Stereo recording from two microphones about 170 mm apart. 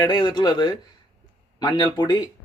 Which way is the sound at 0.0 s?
25° left (ahead or behind).